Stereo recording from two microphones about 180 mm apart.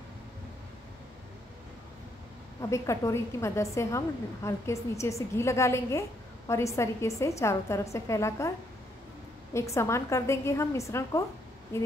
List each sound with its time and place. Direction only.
2.7 s a woman's voice: 15° left (ahead or behind)